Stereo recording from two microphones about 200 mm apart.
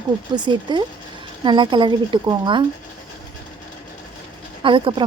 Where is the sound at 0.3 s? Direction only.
20° right (ahead or behind).